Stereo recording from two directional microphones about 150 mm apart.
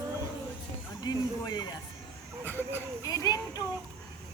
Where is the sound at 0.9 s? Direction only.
30° left (ahead or behind).